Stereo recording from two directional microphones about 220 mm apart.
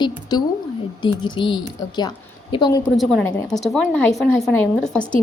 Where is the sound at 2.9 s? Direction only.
Centre (ahead or behind).